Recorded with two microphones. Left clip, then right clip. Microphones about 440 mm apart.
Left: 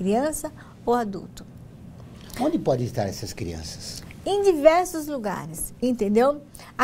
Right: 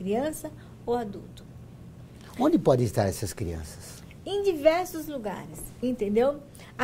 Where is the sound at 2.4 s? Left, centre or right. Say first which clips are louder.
Right 1 dB; right.